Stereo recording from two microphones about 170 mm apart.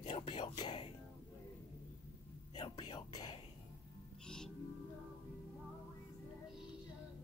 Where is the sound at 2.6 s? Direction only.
30° left (ahead or behind).